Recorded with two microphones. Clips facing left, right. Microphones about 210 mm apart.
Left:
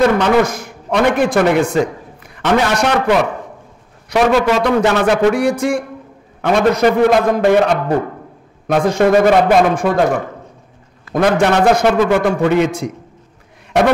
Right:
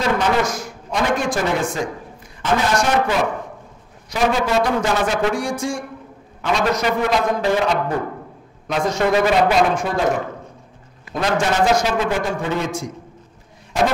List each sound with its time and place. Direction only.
0.0 s a man's voice: 55° left (ahead or behind)
11.1 s a man's voice: 55° left (ahead or behind)
13.7 s a sound: 70° left (ahead or behind)